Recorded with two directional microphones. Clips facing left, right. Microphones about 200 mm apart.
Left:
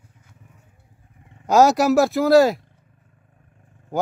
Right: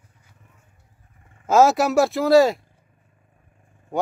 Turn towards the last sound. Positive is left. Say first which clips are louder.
# left 1 dB
turn(degrees=0)  # may be behind; listen again after turning